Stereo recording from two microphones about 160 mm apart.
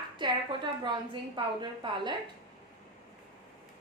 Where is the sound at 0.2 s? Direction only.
30° right (ahead or behind).